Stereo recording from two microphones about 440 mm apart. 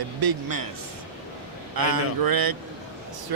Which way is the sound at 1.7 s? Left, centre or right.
Right.